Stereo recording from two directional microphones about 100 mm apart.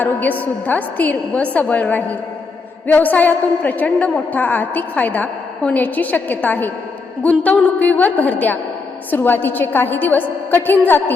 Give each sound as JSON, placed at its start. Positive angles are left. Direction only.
{"t": 0.0, "sound": "a woman's voice", "side_deg": 15}